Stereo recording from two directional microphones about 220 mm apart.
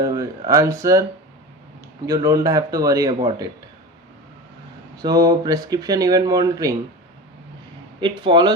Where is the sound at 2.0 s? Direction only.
15° right (ahead or behind).